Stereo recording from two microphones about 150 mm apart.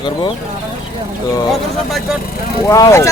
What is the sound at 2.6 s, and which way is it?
Speech, 20° left (ahead or behind).